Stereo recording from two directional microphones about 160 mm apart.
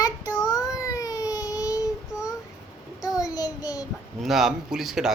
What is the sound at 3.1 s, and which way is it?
Child singing, 20° left (ahead or behind).